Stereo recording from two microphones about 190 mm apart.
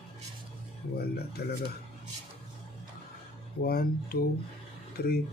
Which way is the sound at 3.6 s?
50° left (ahead or behind).